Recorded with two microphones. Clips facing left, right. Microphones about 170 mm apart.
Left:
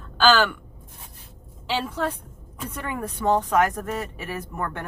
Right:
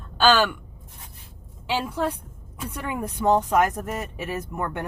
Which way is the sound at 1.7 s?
10° right (ahead or behind).